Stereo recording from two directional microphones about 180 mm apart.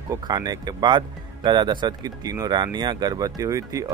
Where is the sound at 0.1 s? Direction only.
25° right (ahead or behind).